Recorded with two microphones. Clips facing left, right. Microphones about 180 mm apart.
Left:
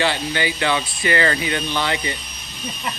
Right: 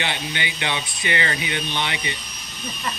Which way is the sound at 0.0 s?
20° right (ahead or behind).